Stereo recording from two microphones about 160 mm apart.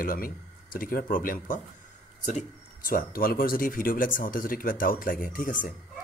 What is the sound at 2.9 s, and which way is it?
Speech, 65° left (ahead or behind).